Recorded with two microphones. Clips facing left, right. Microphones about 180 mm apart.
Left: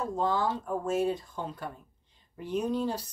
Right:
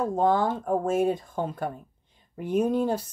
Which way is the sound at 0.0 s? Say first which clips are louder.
Right 6 dB; 55° right (ahead or behind).